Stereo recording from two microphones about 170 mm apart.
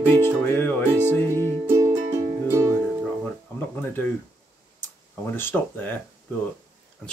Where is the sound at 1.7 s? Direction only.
15° right (ahead or behind).